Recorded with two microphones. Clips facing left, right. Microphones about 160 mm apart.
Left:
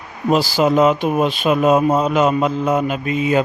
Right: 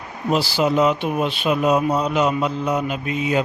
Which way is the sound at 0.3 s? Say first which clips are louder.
Left 4 dB; 45° left (ahead or behind).